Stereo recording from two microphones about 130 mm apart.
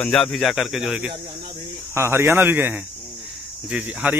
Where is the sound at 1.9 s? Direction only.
20° right (ahead or behind).